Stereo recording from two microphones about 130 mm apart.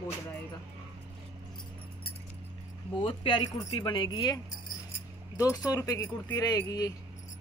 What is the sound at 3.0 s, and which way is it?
Speech, 45° left (ahead or behind).